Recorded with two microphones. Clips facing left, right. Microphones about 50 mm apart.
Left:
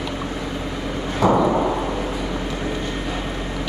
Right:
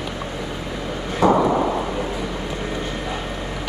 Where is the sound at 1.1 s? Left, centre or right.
Centre.